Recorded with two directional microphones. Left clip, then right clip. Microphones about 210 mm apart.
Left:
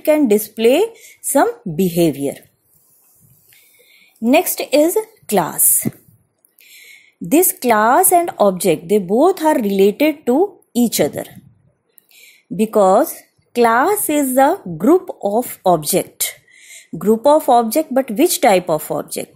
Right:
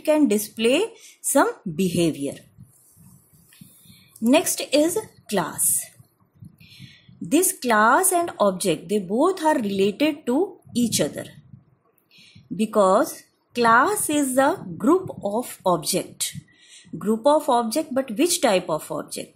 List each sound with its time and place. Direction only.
0.0 s a woman's voice: 20° left (ahead or behind)
4.3 s a woman's voice: 20° left (ahead or behind)